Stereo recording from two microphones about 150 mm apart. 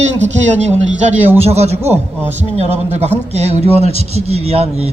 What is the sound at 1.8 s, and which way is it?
Speech, 15° right (ahead or behind).